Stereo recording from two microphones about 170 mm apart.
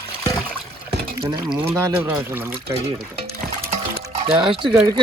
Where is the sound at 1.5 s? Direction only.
10° right (ahead or behind).